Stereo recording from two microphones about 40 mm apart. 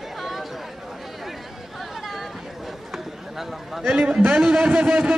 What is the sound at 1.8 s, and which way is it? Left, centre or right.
Chatter, centre.